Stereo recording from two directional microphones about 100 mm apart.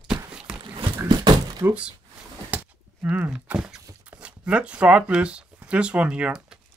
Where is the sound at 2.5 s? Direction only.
15° right (ahead or behind).